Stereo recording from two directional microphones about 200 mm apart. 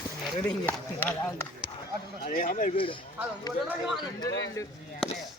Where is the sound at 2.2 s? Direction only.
45° left (ahead or behind).